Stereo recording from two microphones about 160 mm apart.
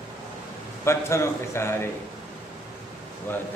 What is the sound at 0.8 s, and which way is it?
A man's voice, 15° left (ahead or behind).